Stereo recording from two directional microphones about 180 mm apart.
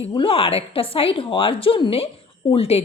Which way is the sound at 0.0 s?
30° left (ahead or behind).